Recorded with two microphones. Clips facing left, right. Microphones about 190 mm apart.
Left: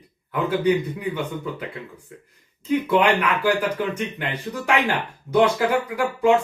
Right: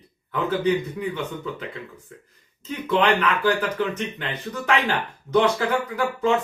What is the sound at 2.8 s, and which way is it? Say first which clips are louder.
Speech: right 1 dB; 10° left (ahead or behind).